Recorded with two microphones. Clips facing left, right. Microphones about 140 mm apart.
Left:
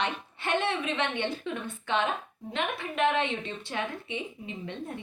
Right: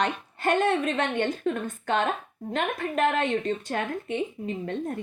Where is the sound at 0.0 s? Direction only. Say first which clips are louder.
Right 6 dB; 45° right (ahead or behind).